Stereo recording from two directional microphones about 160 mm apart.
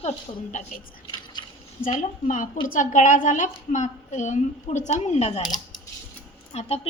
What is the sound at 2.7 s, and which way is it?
A woman's voice, 55° left (ahead or behind).